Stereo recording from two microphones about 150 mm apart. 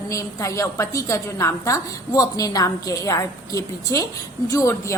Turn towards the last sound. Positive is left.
turn(degrees=20)  # may be behind; listen again after turning